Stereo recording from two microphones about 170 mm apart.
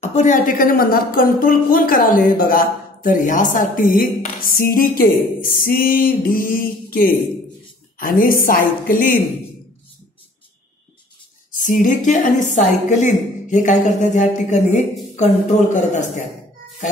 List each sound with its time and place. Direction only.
0.0 s a woman's voice: 45° left (ahead or behind)
11.5 s speech: 50° left (ahead or behind)